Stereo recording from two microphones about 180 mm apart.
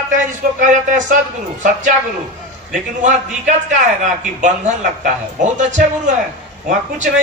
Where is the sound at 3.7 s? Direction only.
45° right (ahead or behind).